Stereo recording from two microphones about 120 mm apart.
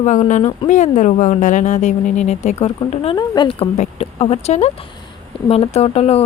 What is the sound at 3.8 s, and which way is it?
Speech, 55° left (ahead or behind).